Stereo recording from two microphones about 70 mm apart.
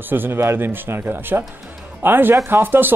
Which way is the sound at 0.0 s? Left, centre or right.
Right.